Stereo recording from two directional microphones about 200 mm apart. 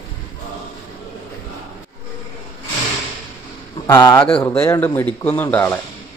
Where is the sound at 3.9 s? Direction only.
15° left (ahead or behind).